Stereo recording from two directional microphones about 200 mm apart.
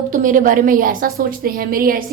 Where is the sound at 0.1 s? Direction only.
40° right (ahead or behind).